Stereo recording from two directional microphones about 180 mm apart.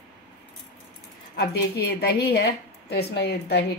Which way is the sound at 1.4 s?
60° left (ahead or behind).